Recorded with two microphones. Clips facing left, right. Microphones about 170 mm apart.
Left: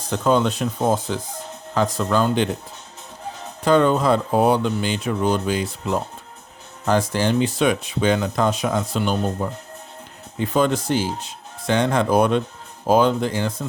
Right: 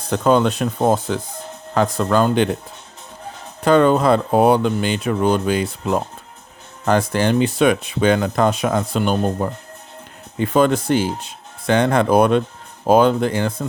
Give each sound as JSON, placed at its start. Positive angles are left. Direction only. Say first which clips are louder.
{"t": 0.1, "sound": "speech", "louder": "right 3 dB", "side_deg": -60}
{"t": 3.6, "sound": "speech", "louder": "right 3 dB", "side_deg": -60}